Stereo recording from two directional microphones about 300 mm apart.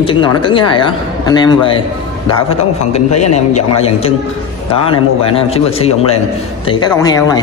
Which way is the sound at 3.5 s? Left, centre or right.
Centre.